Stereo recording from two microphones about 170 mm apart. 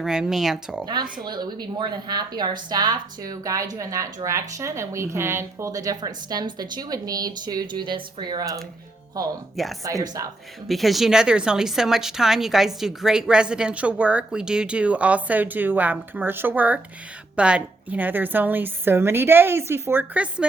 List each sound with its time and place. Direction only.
0.0 s speech: 5° right (ahead or behind)
1.2 s a woman's voice: 25° right (ahead or behind)
9.8 s a woman's voice: 20° right (ahead or behind)
10.7 s a woman's voice: centre (ahead or behind)